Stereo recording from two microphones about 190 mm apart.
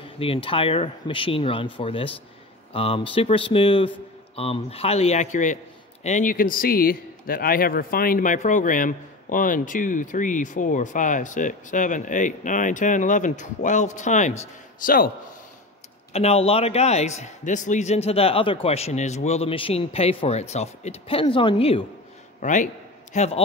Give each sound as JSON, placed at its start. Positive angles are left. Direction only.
{"t": 0.0, "sound": "speech", "side_deg": 30}
{"t": 16.1, "sound": "speech", "side_deg": 35}
{"t": 22.4, "sound": "a man's voice", "side_deg": 40}